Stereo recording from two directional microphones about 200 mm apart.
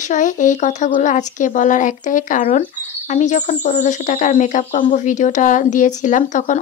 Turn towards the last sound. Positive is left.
turn(degrees=40)  # may be behind; listen again after turning